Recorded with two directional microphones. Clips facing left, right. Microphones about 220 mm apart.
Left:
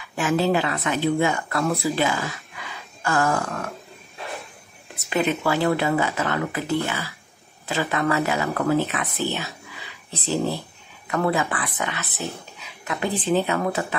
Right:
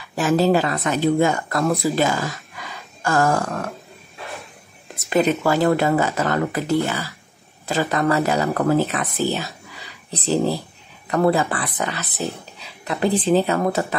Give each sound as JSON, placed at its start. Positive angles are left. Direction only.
{"t": 0.1, "sound": "speech", "side_deg": -40}
{"t": 5.1, "sound": "speech", "side_deg": -40}
{"t": 12.1, "sound": "speech", "side_deg": 0}
{"t": 12.5, "sound": "speech", "side_deg": -30}